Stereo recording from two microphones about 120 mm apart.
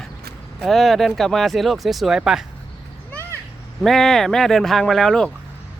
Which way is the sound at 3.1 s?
20° left (ahead or behind).